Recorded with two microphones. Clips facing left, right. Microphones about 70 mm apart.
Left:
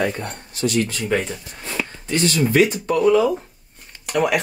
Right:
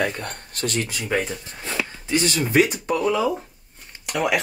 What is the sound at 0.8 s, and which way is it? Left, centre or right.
Speech, centre.